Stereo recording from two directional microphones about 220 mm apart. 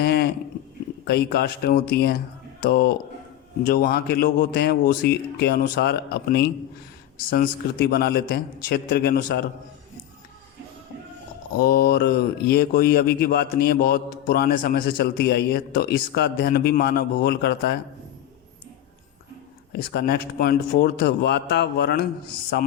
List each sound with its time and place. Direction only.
0.0 s a sound: 45° left (ahead or behind)
1.0 s speech: 45° left (ahead or behind)
11.5 s speech: 40° left (ahead or behind)
19.7 s speech: 45° left (ahead or behind)